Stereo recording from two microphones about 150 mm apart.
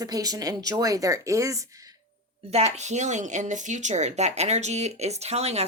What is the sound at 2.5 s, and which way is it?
Speech, 50° right (ahead or behind).